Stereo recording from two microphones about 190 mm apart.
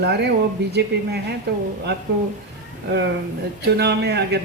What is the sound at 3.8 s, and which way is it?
Speech, 60° right (ahead or behind).